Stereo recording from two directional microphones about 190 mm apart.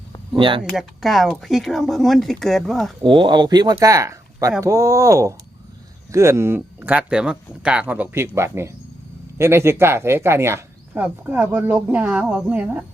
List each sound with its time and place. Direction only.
0.3 s speech: 25° right (ahead or behind)
0.6 s speech: centre (ahead or behind)
3.0 s speech: 25° right (ahead or behind); by 12.8 s 5° right (ahead or behind)